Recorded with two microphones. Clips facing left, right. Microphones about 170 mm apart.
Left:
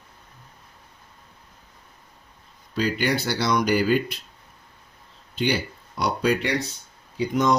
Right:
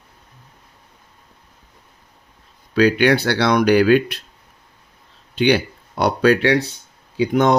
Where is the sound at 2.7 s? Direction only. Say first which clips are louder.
Right 9 dB; 75° right (ahead or behind).